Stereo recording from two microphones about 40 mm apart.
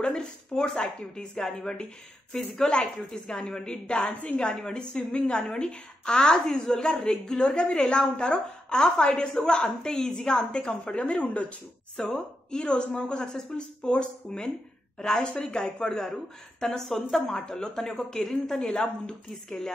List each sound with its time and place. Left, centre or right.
0.1 s a woman's voice: centre
18.8 s a woman's voice: left